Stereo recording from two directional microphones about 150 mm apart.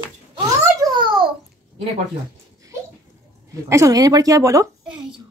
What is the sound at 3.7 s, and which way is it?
Speech, 20° right (ahead or behind).